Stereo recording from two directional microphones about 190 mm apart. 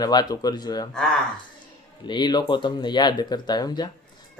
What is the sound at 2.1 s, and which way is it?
Speech, 20° left (ahead or behind).